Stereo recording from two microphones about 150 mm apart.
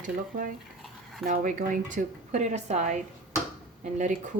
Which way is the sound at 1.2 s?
60° right (ahead or behind).